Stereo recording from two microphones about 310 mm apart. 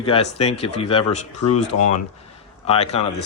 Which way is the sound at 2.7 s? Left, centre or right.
Centre.